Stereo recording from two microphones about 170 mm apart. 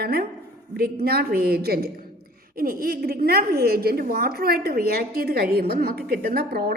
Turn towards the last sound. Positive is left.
turn(degrees=-65)  # may be behind; listen again after turning